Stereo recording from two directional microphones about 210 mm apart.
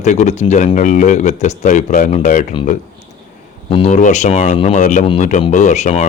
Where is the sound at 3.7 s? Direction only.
30° left (ahead or behind).